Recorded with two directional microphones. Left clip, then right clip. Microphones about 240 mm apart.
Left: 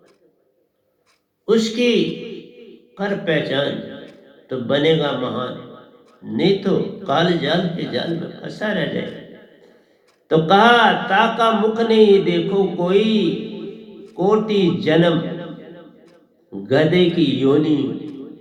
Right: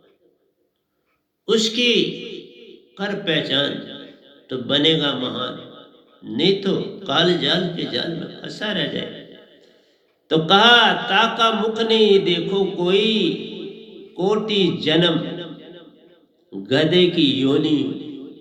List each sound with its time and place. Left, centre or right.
1.5 s a man's voice: right